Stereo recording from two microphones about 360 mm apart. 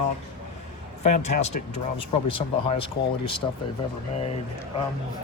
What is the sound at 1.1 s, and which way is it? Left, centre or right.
Speech, centre.